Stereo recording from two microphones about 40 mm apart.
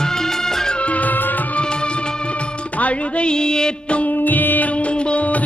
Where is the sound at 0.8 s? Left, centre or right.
Left.